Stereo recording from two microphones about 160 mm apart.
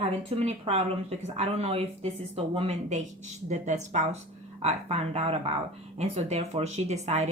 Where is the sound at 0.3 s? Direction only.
40° right (ahead or behind).